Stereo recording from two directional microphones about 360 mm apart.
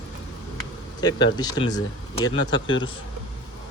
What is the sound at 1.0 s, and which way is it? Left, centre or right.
Speech, centre.